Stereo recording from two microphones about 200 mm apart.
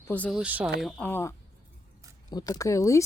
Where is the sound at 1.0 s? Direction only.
10° left (ahead or behind).